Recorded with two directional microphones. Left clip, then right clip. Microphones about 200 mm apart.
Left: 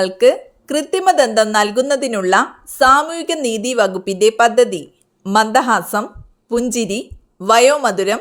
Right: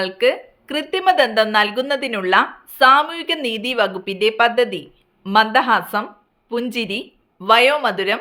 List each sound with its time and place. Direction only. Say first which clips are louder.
0.0 s a woman's voice: left 5 dB; 35° left (ahead or behind)